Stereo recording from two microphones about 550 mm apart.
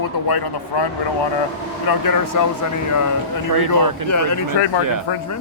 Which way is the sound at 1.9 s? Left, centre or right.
Left.